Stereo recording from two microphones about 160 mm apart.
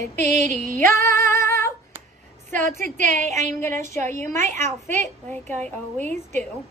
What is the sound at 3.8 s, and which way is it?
Speech, 15° left (ahead or behind).